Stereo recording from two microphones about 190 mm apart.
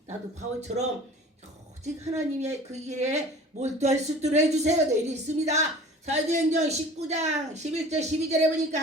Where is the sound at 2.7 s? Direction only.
35° right (ahead or behind).